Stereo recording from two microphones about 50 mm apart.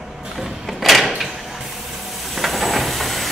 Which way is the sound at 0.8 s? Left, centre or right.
Centre.